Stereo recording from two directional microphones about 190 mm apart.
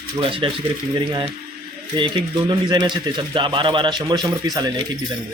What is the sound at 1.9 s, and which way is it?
Speech, 25° right (ahead or behind).